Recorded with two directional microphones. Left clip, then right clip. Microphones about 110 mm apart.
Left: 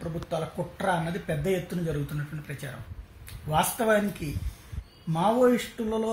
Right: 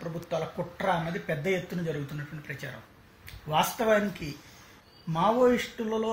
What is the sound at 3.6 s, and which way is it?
Speech, centre (ahead or behind).